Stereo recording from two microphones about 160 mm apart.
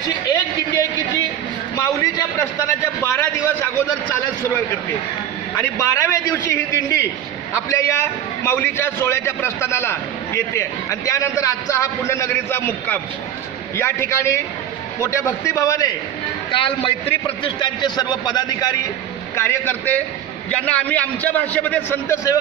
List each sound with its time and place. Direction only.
0.3 s a sound: 25° left (ahead or behind)
3.0 s a man's voice: 15° left (ahead or behind)
5.6 s a man's voice: 15° left (ahead or behind)
16.5 s a man's voice: 35° left (ahead or behind)
19.3 s a man's voice: 15° left (ahead or behind)